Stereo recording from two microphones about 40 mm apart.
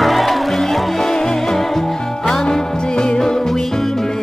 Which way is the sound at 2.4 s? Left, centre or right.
Left.